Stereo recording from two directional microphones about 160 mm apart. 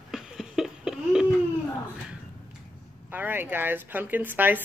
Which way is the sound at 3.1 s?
10° right (ahead or behind).